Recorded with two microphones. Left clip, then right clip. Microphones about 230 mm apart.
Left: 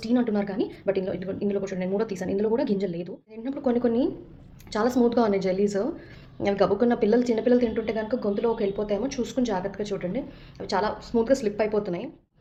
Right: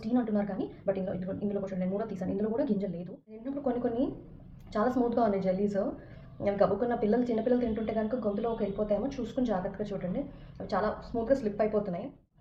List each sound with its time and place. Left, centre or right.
0.0 s a woman's voice: left